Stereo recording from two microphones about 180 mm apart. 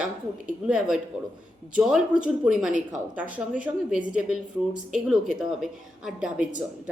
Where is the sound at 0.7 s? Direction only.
5° right (ahead or behind).